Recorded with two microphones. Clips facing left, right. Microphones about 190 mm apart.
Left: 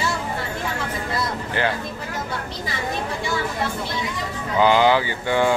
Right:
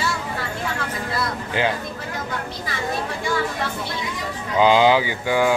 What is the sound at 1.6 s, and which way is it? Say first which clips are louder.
Speech: right 1 dB; 15° right (ahead or behind).